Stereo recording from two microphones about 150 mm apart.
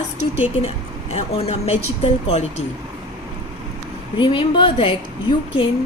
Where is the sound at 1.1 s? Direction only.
40° left (ahead or behind).